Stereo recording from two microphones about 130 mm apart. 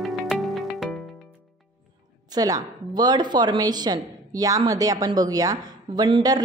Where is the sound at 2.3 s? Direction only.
30° right (ahead or behind).